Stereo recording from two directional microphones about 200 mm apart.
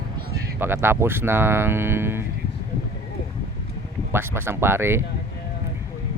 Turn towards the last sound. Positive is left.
turn(degrees=-10)  # may be behind; listen again after turning